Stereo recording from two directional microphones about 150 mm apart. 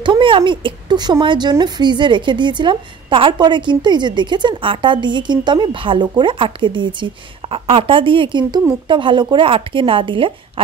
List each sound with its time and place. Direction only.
0.0 s a woman's voice: 35° right (ahead or behind)